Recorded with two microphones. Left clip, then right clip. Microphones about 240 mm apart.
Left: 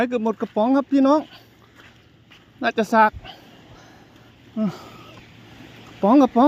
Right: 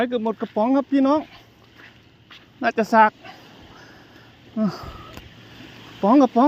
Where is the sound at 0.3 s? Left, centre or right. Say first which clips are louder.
Left 1 dB; centre.